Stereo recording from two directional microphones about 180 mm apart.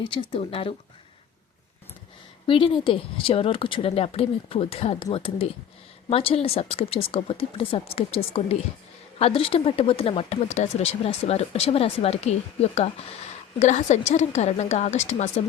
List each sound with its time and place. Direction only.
0.0 s speech: 25° left (ahead or behind)
2.5 s speech: 30° left (ahead or behind)